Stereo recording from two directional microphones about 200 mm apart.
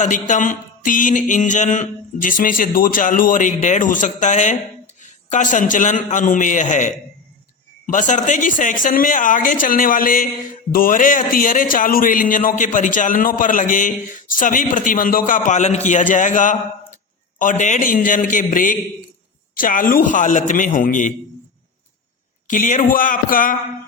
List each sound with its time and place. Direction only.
0.0 s speech: 40° left (ahead or behind)
22.4 s speech: 40° left (ahead or behind)